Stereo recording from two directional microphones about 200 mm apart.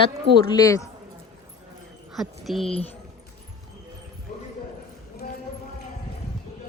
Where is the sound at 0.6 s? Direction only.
15° left (ahead or behind).